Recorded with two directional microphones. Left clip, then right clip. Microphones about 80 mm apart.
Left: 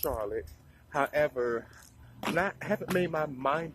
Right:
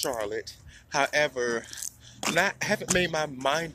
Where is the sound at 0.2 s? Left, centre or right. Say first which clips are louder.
Right 3 dB; right.